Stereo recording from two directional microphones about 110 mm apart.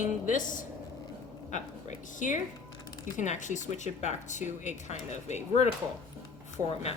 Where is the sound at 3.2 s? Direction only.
90° left.